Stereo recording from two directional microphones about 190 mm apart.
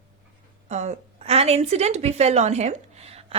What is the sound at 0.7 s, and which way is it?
Speech, 35° right (ahead or behind).